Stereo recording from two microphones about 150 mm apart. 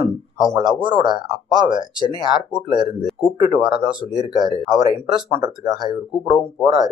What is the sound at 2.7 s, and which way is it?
Speech, 30° right (ahead or behind).